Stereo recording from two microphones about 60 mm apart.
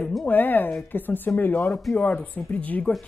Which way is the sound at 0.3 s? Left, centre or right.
Left.